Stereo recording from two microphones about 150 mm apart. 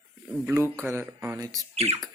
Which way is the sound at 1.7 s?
40° right (ahead or behind).